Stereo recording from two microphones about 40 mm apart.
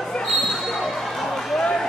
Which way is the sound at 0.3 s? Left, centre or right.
Centre.